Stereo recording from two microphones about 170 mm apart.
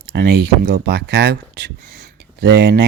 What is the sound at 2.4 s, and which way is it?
Speech, 75° right (ahead or behind).